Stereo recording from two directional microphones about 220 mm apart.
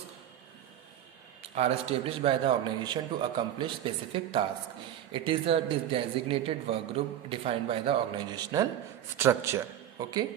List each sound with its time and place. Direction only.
1.4 s a man's voice: 30° right (ahead or behind)